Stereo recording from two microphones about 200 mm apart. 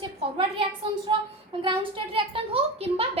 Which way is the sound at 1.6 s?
25° right (ahead or behind).